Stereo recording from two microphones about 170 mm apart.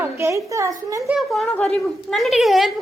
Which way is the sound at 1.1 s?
Centre (ahead or behind).